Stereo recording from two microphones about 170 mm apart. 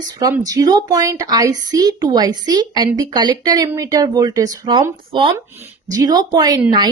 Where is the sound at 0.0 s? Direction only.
20° right (ahead or behind).